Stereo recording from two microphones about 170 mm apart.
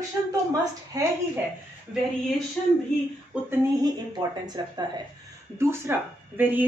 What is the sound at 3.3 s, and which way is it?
Speech, 5° right (ahead or behind).